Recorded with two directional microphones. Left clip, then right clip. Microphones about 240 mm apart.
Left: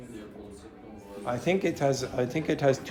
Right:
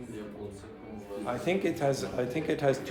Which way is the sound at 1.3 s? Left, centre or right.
Left.